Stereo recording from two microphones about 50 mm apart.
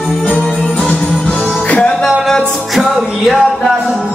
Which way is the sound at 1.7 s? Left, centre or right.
Left.